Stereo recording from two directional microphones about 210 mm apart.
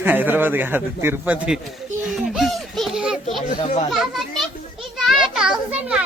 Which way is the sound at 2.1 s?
Centre (ahead or behind).